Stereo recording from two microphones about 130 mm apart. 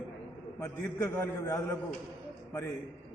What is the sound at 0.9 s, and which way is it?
Speech, 20° left (ahead or behind).